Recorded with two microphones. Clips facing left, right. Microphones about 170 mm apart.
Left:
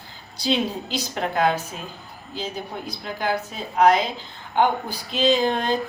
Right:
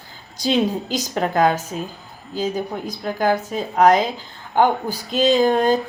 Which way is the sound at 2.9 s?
45° right (ahead or behind).